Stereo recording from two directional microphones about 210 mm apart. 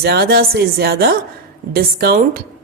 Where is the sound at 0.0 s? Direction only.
50° right (ahead or behind).